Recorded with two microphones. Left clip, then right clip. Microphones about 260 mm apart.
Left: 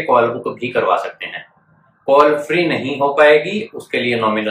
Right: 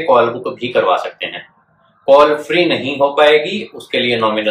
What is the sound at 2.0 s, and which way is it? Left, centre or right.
Speech, centre.